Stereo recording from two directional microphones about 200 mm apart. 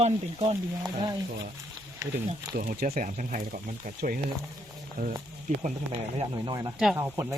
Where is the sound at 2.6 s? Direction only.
45° right (ahead or behind).